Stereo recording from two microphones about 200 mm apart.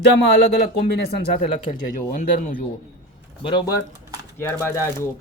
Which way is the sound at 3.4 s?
25° left (ahead or behind).